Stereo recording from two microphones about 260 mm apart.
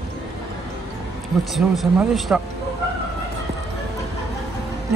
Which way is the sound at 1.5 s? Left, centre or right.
Centre.